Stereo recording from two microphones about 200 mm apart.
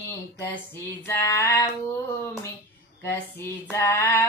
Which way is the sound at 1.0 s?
15° left (ahead or behind).